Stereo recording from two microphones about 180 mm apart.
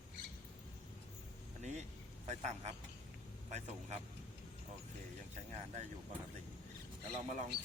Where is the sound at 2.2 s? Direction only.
40° right (ahead or behind).